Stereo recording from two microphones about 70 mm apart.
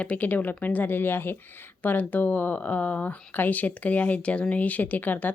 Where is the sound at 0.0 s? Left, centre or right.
Left.